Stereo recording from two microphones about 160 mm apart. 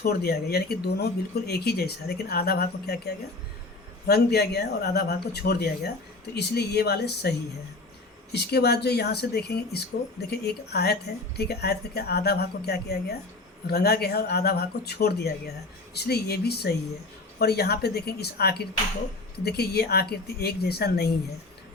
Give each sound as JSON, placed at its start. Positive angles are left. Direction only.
{"t": 0.0, "sound": "speech", "side_deg": 75}
{"t": 4.0, "sound": "speech", "side_deg": 85}
{"t": 13.7, "sound": "speech", "side_deg": 80}